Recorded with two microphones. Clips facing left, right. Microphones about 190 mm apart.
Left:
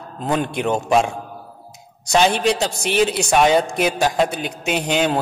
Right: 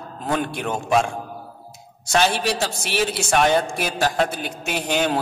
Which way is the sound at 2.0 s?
15° left (ahead or behind).